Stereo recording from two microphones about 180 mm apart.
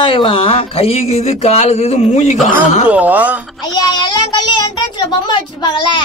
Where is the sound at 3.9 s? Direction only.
25° left (ahead or behind).